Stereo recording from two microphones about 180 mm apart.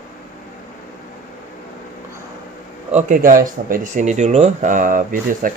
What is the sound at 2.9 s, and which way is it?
Speech, 45° right (ahead or behind).